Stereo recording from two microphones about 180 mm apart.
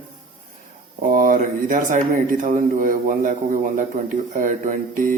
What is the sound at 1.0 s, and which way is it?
A man's voice, 50° right (ahead or behind).